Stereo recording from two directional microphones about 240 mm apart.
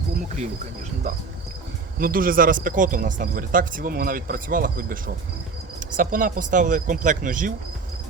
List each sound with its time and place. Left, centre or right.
2.0 s speech: right